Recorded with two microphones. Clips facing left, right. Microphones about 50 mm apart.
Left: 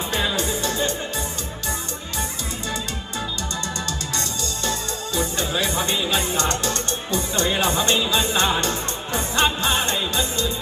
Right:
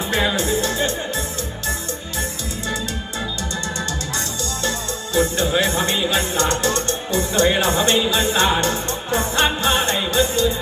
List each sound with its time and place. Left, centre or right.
0.1 s music: right
0.3 s music: right
3.8 s music: right
5.1 s speech: right